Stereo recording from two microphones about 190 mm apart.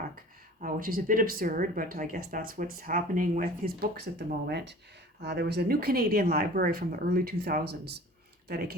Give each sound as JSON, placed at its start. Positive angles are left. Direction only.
{"t": 0.6, "sound": "speech", "side_deg": -50}